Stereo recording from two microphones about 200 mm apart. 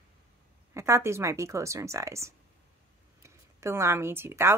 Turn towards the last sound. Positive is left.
turn(degrees=-10)  # may be behind; listen again after turning